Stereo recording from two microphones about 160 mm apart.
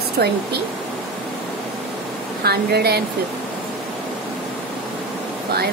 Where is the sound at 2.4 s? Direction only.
80° right.